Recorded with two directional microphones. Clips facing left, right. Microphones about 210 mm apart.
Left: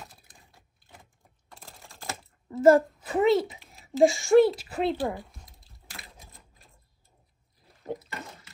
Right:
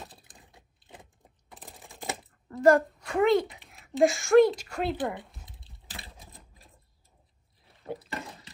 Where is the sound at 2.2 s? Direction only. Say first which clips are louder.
Left 2 dB; 5° left (ahead or behind).